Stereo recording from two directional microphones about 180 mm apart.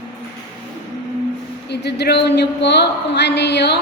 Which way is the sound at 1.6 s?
70° left (ahead or behind).